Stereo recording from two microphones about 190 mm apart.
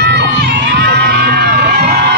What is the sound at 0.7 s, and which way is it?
Music, 60° right (ahead or behind).